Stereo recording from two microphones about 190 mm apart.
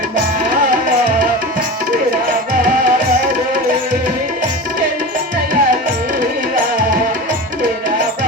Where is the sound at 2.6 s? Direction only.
45° right (ahead or behind).